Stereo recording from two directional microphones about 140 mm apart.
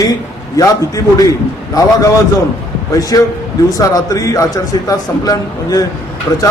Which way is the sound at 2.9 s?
25° left (ahead or behind).